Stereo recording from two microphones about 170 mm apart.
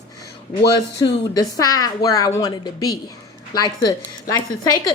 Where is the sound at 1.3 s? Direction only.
20° left (ahead or behind).